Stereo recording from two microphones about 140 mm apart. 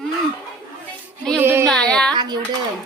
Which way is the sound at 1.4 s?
15° right (ahead or behind).